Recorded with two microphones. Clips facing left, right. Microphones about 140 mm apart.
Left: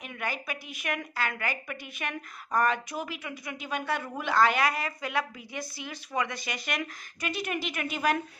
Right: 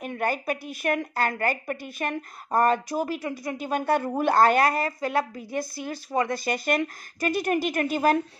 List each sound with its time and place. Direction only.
0.0 s a woman's voice: 45° right (ahead or behind)